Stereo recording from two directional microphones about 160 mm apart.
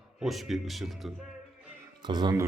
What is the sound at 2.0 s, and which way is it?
Speech, 30° right (ahead or behind).